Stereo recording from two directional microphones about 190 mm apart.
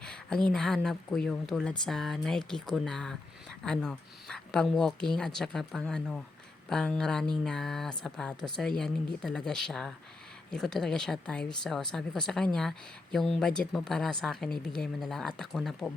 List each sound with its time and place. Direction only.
0.0 s speech: 5° left (ahead or behind)